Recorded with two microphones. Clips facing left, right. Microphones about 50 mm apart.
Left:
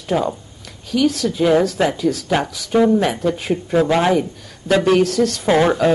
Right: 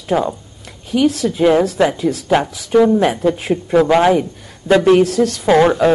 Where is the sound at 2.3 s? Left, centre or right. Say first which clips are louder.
Right 7 dB; centre.